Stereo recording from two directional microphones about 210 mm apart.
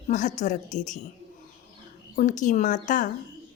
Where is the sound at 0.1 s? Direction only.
35° left (ahead or behind).